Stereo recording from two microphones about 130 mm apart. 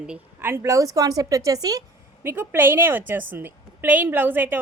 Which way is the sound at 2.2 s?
15° right (ahead or behind).